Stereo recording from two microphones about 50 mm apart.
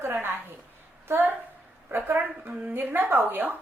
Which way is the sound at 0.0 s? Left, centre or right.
Right.